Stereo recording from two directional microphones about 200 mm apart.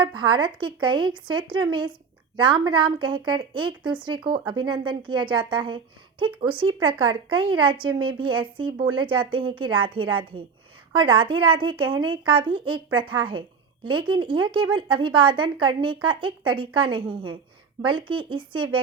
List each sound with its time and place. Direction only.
0.2 s speech: 25° right (ahead or behind)